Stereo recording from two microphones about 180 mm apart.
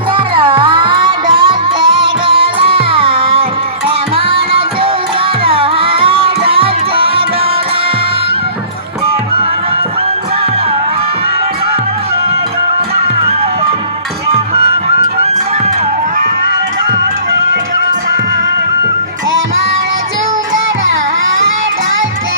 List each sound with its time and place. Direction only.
0.3 s music: 30° right (ahead or behind)
14.3 s music: 35° right (ahead or behind)